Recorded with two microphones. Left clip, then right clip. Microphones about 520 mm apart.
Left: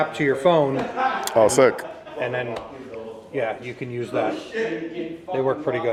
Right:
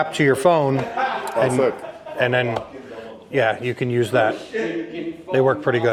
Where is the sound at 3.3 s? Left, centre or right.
Right.